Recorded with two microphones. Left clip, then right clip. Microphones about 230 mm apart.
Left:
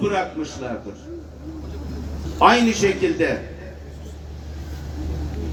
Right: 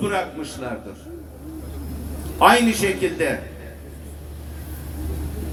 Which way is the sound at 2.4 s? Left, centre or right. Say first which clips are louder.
Even; right.